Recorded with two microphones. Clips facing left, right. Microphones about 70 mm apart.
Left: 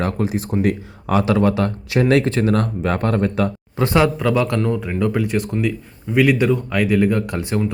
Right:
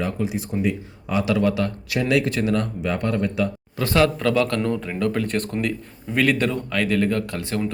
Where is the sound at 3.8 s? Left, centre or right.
Left.